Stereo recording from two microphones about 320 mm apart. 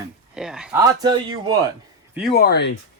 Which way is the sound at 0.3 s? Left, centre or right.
Centre.